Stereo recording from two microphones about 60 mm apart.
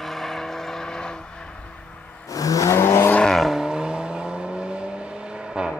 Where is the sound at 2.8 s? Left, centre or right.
Left.